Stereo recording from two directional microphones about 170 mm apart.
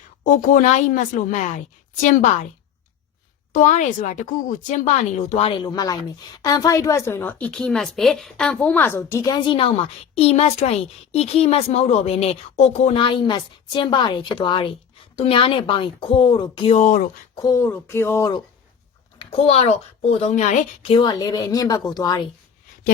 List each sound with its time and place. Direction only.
0.3 s a woman's voice: 50° left (ahead or behind)
3.5 s a woman's voice: 45° left (ahead or behind)
5.5 s a woman's voice: 25° left (ahead or behind)
16.7 s a woman's voice: 45° left (ahead or behind)
17.4 s speech: 15° left (ahead or behind)
19.2 s a woman's voice: 35° left (ahead or behind)